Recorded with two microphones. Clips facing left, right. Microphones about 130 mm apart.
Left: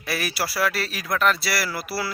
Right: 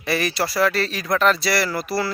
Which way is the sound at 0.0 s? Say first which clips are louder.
Right 5 dB; 5° left (ahead or behind).